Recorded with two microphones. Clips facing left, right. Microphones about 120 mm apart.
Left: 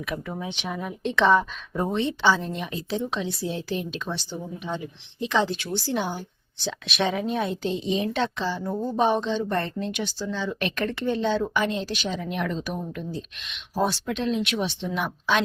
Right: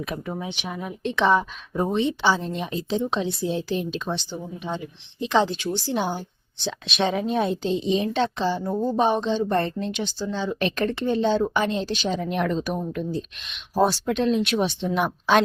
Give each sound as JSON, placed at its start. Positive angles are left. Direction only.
{"t": 0.3, "sound": "a woman's voice", "side_deg": -20}
{"t": 0.6, "sound": "a woman's voice", "side_deg": -5}
{"t": 12.1, "sound": "a woman's voice", "side_deg": -40}